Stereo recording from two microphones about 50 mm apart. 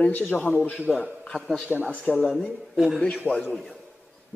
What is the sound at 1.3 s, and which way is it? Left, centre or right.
Speech, centre.